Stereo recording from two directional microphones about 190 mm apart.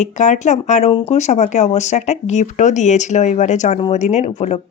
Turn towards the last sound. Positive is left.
turn(degrees=35)  # may be behind; listen again after turning